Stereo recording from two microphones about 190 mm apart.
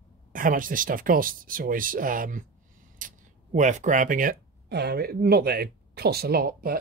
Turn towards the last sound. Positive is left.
turn(degrees=-50)  # may be behind; listen again after turning